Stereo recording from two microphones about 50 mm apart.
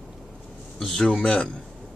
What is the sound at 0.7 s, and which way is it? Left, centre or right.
Speech, centre.